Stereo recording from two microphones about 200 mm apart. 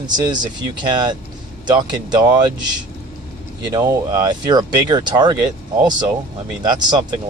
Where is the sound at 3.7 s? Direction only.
15° right (ahead or behind).